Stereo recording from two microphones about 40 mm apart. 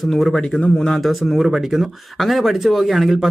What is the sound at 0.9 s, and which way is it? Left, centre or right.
Speech, centre.